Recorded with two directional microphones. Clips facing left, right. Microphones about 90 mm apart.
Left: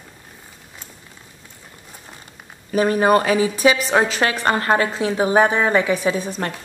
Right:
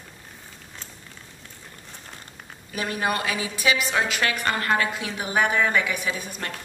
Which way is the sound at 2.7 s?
35° left (ahead or behind).